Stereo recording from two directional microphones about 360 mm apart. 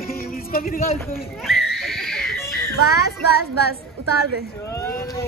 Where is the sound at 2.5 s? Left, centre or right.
Left.